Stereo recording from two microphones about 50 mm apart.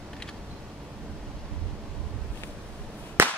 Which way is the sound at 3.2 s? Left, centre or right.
Right.